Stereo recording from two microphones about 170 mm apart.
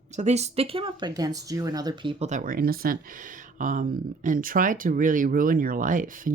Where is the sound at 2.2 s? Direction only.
50° right (ahead or behind).